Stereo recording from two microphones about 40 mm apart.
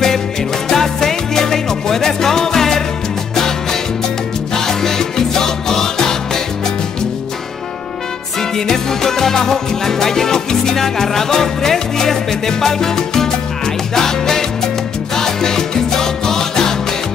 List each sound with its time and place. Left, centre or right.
0.7 s music: centre
4.6 s music: centre
8.4 s music: centre
15.1 s salsa music: centre